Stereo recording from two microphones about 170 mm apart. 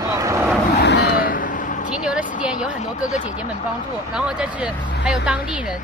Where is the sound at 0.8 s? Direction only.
85° left; by 1.9 s 50° left (ahead or behind).